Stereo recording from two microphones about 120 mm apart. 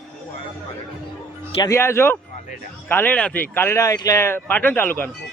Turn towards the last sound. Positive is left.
turn(degrees=15)  # may be behind; listen again after turning